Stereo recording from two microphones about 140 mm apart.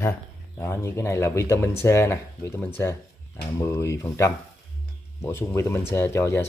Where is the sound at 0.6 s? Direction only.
20° left (ahead or behind).